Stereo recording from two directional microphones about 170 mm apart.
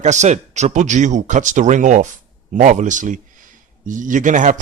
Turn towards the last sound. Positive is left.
turn(degrees=-50)  # may be behind; listen again after turning